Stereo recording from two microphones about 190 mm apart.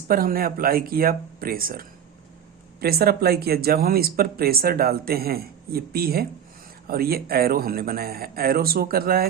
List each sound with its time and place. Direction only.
0.1 s speech: 50° right (ahead or behind)